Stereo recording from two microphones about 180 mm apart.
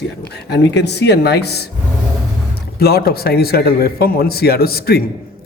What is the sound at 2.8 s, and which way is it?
A man's voice, 60° left (ahead or behind).